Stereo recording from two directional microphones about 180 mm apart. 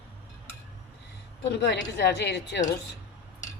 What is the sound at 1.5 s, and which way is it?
Speech, 70° left (ahead or behind).